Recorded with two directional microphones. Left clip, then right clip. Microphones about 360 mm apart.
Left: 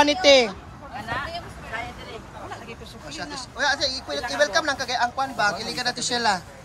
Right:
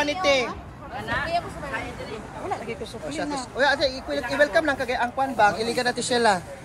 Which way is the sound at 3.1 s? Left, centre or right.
Centre.